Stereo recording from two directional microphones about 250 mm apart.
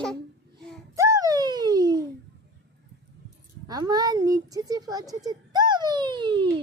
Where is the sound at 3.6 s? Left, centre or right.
Centre.